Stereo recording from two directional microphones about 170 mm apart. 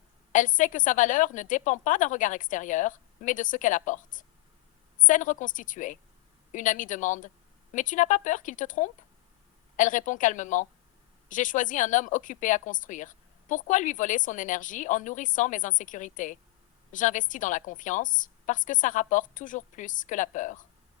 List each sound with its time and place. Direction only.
0.3 s a woman's voice: 50° left (ahead or behind)